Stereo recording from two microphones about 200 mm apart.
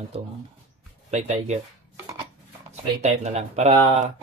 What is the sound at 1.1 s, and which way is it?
Speech, 35° right (ahead or behind).